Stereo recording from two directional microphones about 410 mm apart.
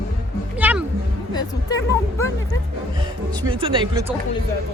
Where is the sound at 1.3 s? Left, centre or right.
Centre.